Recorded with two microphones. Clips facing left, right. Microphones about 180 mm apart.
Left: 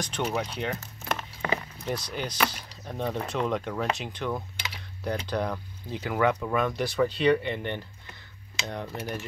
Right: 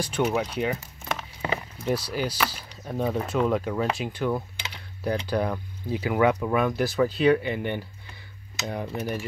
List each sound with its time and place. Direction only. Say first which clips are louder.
0.0 s speech: right 5 dB; 5° right (ahead or behind)
8.8 s speech: right 4 dB; 15° right (ahead or behind)